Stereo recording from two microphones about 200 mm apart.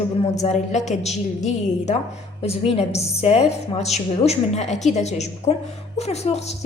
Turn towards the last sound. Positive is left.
turn(degrees=30)  # may be behind; listen again after turning